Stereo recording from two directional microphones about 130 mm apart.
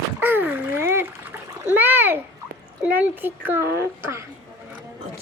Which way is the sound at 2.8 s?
15° right (ahead or behind).